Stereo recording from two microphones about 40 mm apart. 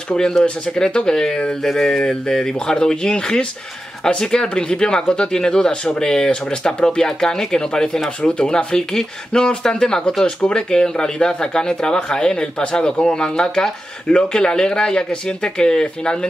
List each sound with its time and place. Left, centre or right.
0.4 s speech: left
10.2 s speech: left
10.7 s speech: centre